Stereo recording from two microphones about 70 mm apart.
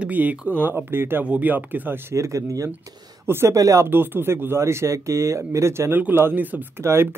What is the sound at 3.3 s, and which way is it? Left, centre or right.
Speech, right.